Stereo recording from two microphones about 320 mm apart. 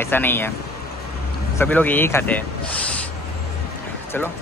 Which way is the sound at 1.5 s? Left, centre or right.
Centre.